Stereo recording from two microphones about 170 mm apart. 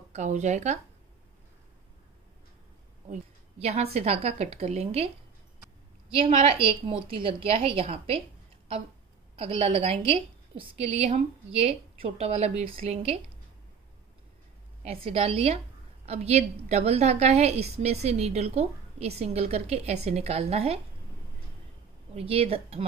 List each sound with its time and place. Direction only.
0.1 s speech: 45° right (ahead or behind)
3.1 s a woman's voice: 40° right (ahead or behind)
6.1 s a woman's voice: 35° right (ahead or behind)
9.4 s a woman's voice: 35° right (ahead or behind)
14.8 s a woman's voice: 35° right (ahead or behind)
22.1 s a woman's voice: 35° right (ahead or behind)